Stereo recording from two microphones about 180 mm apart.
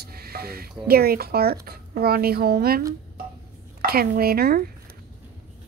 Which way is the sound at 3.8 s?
55° right (ahead or behind).